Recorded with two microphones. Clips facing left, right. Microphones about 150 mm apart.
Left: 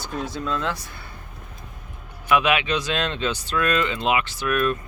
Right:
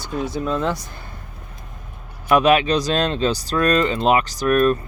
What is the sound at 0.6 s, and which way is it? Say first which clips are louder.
Speech: right 5 dB; 35° right (ahead or behind).